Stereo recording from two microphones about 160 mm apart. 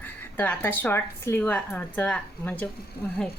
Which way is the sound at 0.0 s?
10° left (ahead or behind).